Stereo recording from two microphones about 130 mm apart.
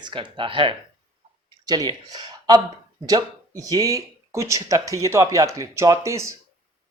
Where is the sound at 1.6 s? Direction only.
30° right (ahead or behind).